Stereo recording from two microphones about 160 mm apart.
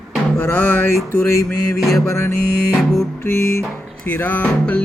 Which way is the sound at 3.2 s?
15° left (ahead or behind).